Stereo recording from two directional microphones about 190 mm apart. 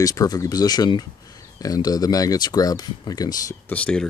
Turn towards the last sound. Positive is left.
turn(degrees=5)  # may be behind; listen again after turning